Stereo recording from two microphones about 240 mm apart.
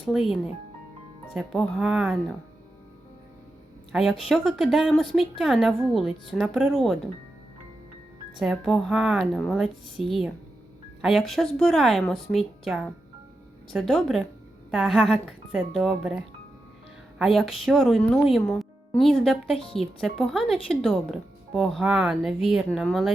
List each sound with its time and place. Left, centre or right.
0.0 s speech: centre
3.9 s speech: centre
8.4 s speech: centre
19.5 s speech: left
19.8 s speech: centre